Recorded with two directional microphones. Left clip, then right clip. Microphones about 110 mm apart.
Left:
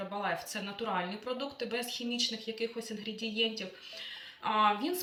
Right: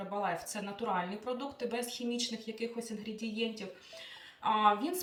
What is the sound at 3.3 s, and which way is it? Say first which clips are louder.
Speech: left 5 dB; 35° right (ahead or behind).